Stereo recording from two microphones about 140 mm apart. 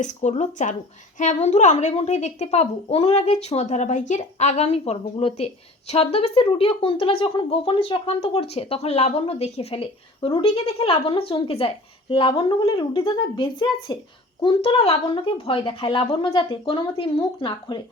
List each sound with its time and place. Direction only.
0.0 s speech: 55° left (ahead or behind); by 17.7 s 35° left (ahead or behind)